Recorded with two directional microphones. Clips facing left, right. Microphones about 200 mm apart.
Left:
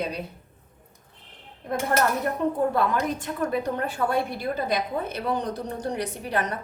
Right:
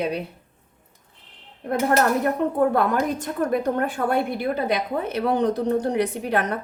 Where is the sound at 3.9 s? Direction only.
55° right (ahead or behind).